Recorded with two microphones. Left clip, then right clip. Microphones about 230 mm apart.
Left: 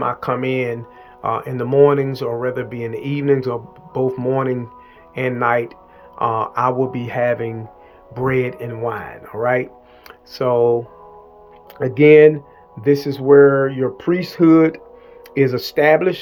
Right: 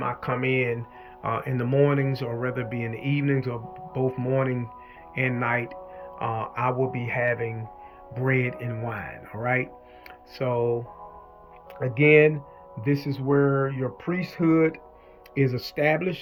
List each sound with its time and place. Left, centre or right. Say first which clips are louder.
0.0 s speech: left 7 dB; centre
8.1 s speech: left 7 dB; centre
11.8 s speech: left 9 dB; left
13.2 s speech: left 13 dB; left